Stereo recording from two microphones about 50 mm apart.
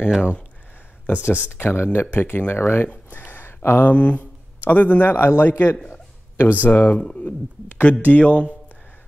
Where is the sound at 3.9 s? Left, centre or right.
Left.